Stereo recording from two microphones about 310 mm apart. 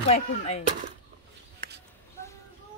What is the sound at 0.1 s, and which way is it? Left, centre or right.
Speech, centre.